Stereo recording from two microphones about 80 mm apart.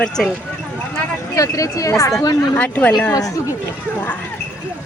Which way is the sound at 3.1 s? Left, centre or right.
Left.